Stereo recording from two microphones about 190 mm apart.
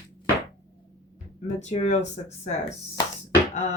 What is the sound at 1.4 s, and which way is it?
Speech, 35° left (ahead or behind).